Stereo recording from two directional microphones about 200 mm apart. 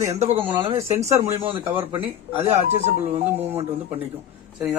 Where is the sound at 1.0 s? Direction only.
15° right (ahead or behind).